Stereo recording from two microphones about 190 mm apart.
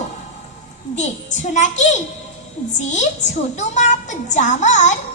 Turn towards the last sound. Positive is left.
turn(degrees=40)  # may be behind; listen again after turning